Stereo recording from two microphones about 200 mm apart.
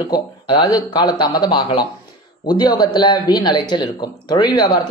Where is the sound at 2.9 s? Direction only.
20° left (ahead or behind).